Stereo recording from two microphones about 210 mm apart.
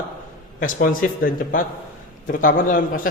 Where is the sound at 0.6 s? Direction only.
40° left (ahead or behind).